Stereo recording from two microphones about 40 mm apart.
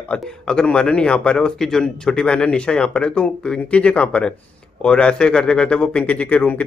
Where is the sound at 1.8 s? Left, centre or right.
Left.